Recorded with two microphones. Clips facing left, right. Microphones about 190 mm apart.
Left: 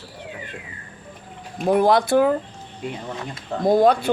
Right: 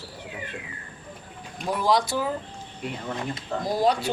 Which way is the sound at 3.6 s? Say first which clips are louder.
Left 8 dB; 55° left (ahead or behind).